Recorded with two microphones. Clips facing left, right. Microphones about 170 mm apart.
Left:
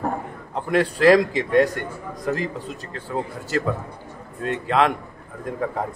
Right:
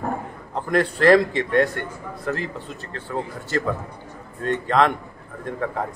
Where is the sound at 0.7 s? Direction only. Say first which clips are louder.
Even; 10° left (ahead or behind).